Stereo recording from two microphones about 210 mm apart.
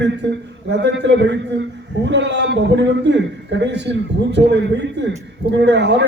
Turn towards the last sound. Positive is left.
turn(degrees=-55)  # may be behind; listen again after turning